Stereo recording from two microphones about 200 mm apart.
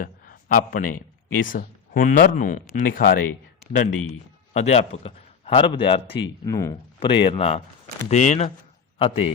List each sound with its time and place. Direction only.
0.0 s speech: 45° left (ahead or behind)
3.6 s a sound: 40° left (ahead or behind)
4.5 s a man's voice: 30° left (ahead or behind)